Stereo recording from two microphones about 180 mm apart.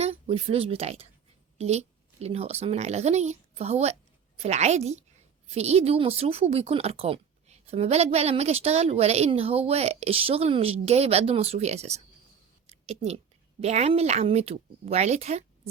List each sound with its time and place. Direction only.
0.0 s a woman's voice: 35° right (ahead or behind)